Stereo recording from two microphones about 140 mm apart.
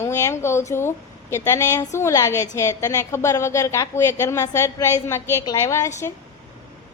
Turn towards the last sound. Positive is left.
turn(degrees=20)  # may be behind; listen again after turning